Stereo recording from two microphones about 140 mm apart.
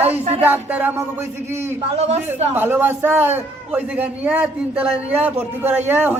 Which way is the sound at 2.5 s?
15° right (ahead or behind).